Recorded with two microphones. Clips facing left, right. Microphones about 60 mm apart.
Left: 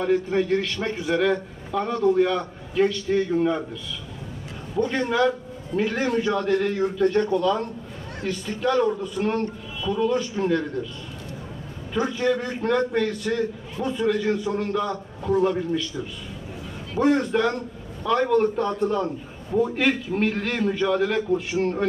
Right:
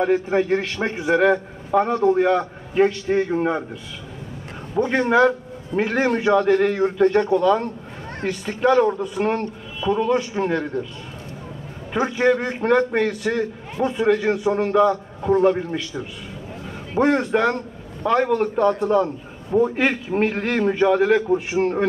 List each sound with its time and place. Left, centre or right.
0.0 s a man's voice: right
4.8 s a man's voice: right
11.9 s a man's voice: right